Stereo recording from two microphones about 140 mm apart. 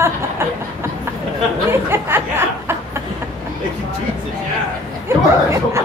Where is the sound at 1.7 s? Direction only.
15° right (ahead or behind).